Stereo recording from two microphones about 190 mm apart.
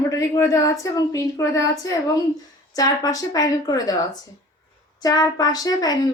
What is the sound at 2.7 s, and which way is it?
A woman's voice, 20° left (ahead or behind).